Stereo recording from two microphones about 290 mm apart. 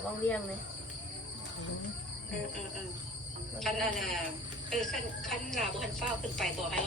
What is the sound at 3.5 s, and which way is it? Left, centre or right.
Speech, centre.